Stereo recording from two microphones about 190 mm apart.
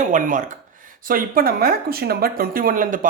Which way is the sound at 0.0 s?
45° right (ahead or behind).